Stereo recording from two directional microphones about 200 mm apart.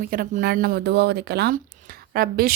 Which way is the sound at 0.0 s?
45° right (ahead or behind).